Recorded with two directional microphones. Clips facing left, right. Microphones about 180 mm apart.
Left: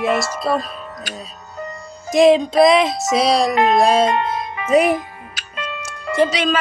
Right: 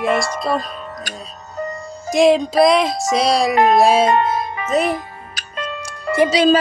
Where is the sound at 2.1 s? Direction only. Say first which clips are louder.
Left 1 dB; centre (ahead or behind).